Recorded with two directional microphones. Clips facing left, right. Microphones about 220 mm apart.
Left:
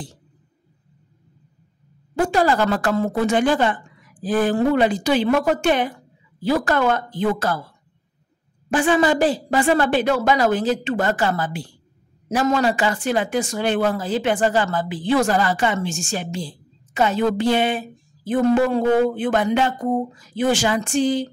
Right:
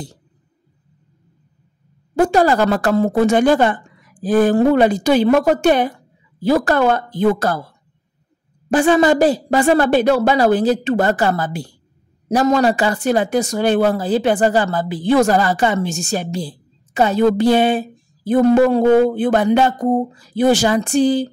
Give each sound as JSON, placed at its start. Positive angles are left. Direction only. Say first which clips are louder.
{"t": 2.1, "sound": "a woman's voice", "louder": "right 4 dB", "side_deg": -40}
{"t": 8.6, "sound": "speech", "louder": "right 5 dB", "side_deg": -40}